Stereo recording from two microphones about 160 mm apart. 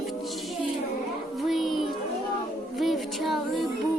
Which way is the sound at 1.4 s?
Centre (ahead or behind).